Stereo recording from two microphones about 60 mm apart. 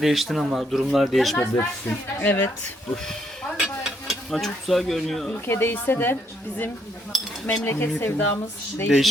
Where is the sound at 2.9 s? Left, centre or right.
Centre.